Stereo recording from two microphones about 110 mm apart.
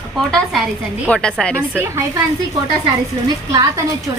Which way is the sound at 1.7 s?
20° right (ahead or behind).